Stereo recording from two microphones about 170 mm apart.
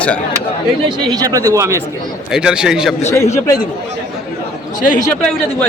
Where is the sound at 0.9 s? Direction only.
20° right (ahead or behind).